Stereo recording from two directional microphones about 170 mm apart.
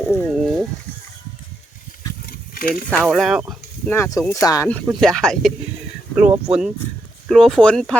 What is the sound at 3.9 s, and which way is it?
Speech, 15° left (ahead or behind).